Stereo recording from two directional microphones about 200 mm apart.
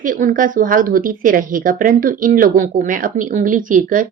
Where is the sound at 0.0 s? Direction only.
40° right (ahead or behind).